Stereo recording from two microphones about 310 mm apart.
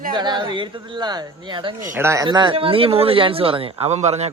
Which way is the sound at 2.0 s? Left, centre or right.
Centre.